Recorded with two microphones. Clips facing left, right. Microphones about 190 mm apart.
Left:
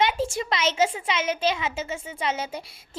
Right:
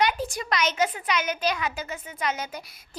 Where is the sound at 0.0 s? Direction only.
25° left (ahead or behind).